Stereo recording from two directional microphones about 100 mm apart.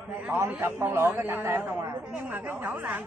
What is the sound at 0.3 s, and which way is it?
A man's voice, 20° right (ahead or behind).